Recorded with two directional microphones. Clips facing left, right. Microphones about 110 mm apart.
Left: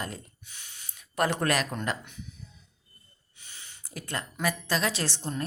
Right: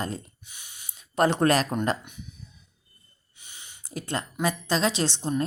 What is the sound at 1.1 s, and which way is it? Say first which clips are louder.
Speech: right 5 dB; 25° right (ahead or behind).